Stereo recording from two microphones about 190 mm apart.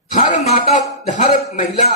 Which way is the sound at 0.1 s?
40° left (ahead or behind).